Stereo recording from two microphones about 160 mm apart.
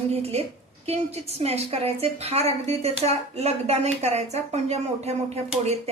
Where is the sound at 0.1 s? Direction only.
40° right (ahead or behind).